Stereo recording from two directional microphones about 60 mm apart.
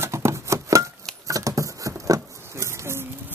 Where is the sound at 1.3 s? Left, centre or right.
Right.